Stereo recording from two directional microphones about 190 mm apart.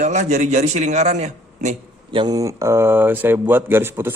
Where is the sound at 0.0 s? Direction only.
40° right (ahead or behind).